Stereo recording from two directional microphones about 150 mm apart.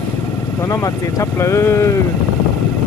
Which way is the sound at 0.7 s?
20° left (ahead or behind).